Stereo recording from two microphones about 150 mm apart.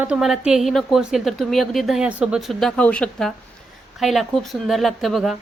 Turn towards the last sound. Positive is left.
turn(degrees=0)  # may be behind; listen again after turning